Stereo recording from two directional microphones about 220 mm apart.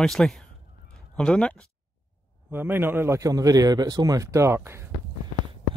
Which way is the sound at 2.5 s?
10° right (ahead or behind).